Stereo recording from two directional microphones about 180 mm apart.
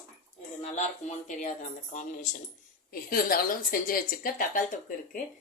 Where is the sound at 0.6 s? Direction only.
40° left (ahead or behind).